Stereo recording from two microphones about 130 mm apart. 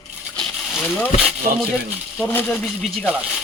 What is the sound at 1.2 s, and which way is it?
Speech, 5° right (ahead or behind).